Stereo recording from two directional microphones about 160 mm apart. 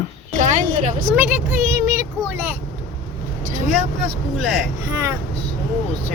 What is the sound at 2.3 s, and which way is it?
Vehicle, 10° right (ahead or behind).